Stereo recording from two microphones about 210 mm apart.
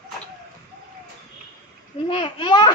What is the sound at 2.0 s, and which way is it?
Speech, 25° left (ahead or behind).